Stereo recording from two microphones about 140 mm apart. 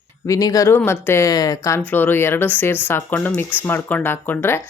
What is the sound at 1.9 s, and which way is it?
Speech, 15° left (ahead or behind).